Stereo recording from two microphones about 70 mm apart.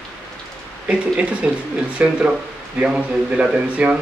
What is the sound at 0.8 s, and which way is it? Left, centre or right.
Speech, centre.